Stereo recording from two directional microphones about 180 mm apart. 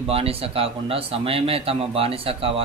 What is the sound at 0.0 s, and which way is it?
A man's voice, 35° right (ahead or behind).